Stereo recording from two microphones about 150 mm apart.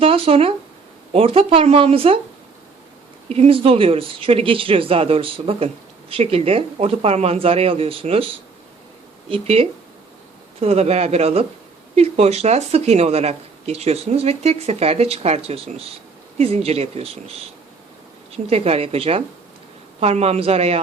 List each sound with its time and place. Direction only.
0.0 s speech: 40° right (ahead or behind)
3.2 s speech: 45° right (ahead or behind)